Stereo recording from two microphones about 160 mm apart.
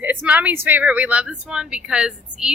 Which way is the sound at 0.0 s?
10° right (ahead or behind).